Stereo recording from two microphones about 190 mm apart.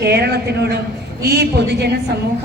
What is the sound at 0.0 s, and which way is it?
A woman's voice, 60° right (ahead or behind).